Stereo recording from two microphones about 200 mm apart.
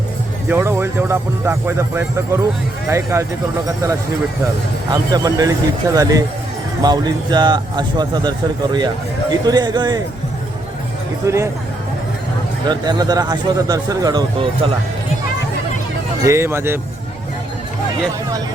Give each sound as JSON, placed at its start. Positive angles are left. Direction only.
{"t": 0.4, "sound": "speech", "side_deg": -10}
{"t": 4.9, "sound": "speech", "side_deg": -20}
{"t": 11.2, "sound": "speech", "side_deg": -15}
{"t": 12.6, "sound": "speech", "side_deg": -20}
{"t": 16.2, "sound": "speech", "side_deg": -15}